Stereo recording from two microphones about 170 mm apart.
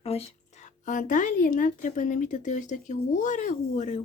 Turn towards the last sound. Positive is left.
turn(degrees=45)  # may be behind; listen again after turning